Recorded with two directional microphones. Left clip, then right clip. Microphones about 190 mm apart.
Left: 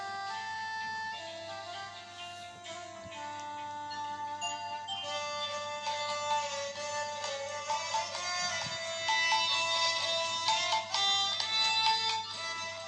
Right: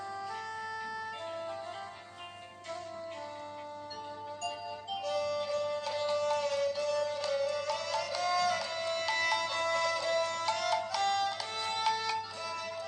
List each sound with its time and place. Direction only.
5.0 s music: 45° right (ahead or behind)